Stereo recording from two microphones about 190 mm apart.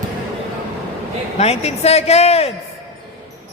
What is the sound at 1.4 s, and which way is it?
A woman's voice, 35° left (ahead or behind).